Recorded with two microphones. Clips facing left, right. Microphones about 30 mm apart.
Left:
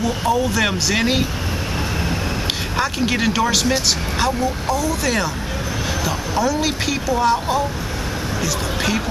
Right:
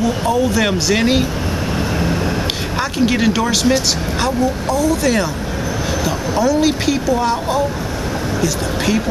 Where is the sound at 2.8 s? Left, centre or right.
Centre.